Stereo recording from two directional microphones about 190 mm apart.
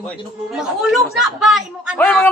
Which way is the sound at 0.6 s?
Centre (ahead or behind).